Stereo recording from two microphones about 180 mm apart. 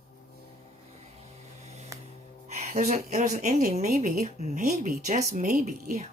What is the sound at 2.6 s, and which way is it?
Speech, 40° right (ahead or behind).